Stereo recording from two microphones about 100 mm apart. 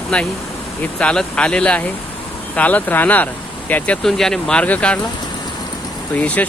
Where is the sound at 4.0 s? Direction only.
5° left (ahead or behind).